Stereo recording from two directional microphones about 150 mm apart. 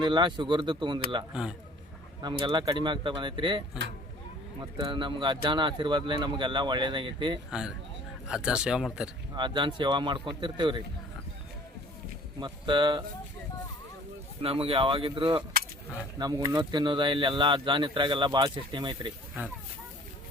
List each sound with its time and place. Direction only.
0.0 s speech: 30° right (ahead or behind)
1.3 s speech: 5° right (ahead or behind)
2.4 s speech: 30° right (ahead or behind)
4.8 s speech: 30° right (ahead or behind)
8.3 s speech: 5° right (ahead or behind)
9.3 s speech: 30° right (ahead or behind)
12.4 s speech: 30° right (ahead or behind)
14.4 s speech: 40° right (ahead or behind)